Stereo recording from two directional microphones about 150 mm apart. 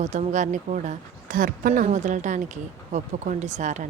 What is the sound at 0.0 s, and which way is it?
Speech, 50° right (ahead or behind).